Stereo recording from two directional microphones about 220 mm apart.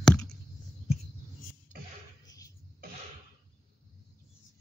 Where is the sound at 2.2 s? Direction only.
15° left (ahead or behind).